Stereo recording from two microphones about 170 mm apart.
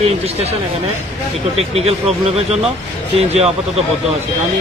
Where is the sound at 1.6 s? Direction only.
35° right (ahead or behind).